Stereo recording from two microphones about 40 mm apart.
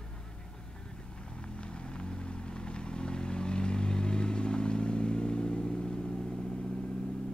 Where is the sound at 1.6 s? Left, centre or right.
Left.